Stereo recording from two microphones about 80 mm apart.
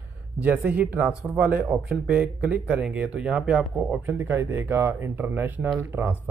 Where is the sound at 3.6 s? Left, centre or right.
Centre.